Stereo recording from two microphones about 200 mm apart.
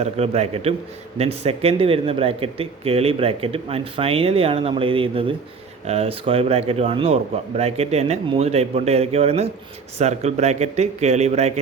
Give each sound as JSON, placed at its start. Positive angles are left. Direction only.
{"t": 0.0, "sound": "speech", "side_deg": -30}